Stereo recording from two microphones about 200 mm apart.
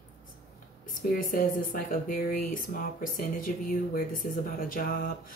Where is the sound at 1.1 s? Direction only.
45° left (ahead or behind).